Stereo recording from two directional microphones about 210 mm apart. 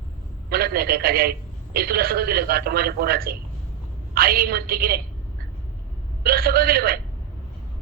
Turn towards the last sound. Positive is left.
turn(degrees=-45)  # may be behind; listen again after turning